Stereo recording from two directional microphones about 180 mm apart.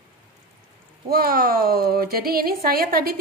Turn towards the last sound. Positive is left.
turn(degrees=-55)  # may be behind; listen again after turning